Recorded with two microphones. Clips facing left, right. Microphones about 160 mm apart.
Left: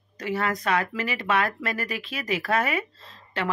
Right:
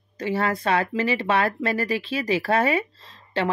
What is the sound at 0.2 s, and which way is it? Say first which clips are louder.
Speech: right 3 dB; 30° right (ahead or behind).